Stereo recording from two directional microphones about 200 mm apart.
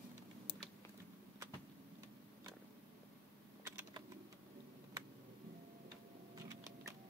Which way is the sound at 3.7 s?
15° right (ahead or behind).